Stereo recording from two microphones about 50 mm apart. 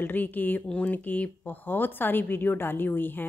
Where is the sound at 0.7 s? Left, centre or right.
Left.